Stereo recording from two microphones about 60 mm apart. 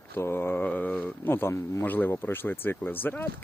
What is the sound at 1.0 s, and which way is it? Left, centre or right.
Speech, left.